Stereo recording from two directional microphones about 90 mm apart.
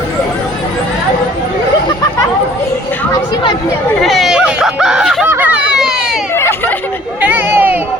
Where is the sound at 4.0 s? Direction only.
Centre (ahead or behind).